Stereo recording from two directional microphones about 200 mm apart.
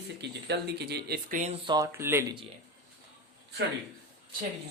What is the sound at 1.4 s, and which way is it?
Speech, 30° right (ahead or behind).